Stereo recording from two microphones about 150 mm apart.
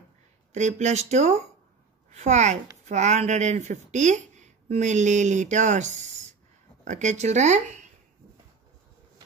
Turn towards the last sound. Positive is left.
turn(degrees=-50)  # may be behind; listen again after turning